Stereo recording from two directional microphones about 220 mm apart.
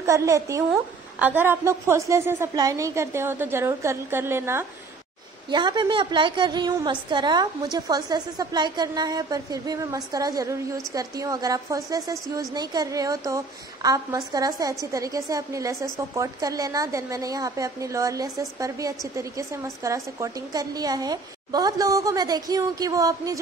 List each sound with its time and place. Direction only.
0.0 s a woman's voice: 15° right (ahead or behind)